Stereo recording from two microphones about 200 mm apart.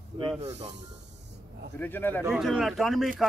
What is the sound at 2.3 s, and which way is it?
Speech, centre (ahead or behind).